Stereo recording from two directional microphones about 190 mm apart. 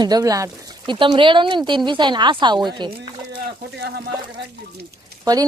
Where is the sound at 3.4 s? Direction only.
55° right (ahead or behind).